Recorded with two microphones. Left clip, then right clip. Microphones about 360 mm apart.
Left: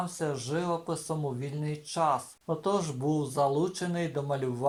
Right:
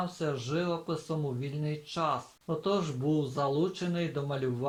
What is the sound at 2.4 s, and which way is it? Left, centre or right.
Speech, centre.